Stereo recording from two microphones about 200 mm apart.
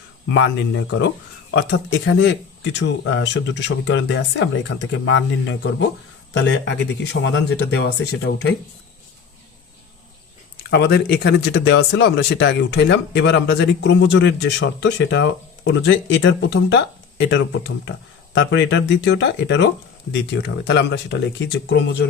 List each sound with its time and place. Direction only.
0.3 s speech: 65° left (ahead or behind)
10.7 s speech: 55° left (ahead or behind)
18.3 s speech: 65° left (ahead or behind)